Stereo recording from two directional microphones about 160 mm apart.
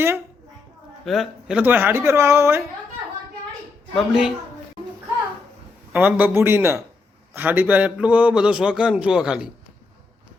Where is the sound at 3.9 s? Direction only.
5° right (ahead or behind).